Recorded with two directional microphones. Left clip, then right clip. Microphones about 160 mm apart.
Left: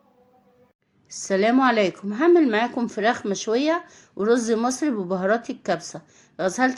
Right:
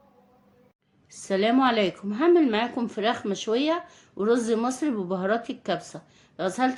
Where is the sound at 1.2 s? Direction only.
30° left (ahead or behind).